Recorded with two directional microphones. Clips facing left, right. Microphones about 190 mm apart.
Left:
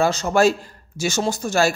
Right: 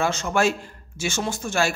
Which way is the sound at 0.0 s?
35° left (ahead or behind).